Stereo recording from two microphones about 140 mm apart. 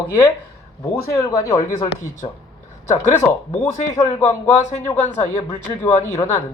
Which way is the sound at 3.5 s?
55° left (ahead or behind).